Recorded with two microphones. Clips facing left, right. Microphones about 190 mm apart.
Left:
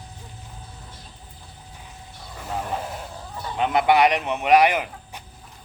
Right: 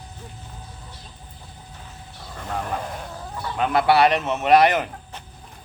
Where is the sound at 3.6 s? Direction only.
20° left (ahead or behind).